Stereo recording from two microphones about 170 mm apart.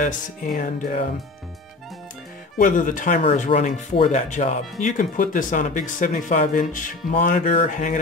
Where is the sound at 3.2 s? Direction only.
35° left (ahead or behind).